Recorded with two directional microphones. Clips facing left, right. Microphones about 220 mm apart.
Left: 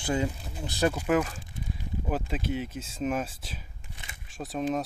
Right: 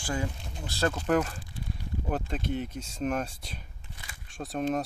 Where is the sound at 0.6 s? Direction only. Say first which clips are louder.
Left 2 dB; 15° left (ahead or behind).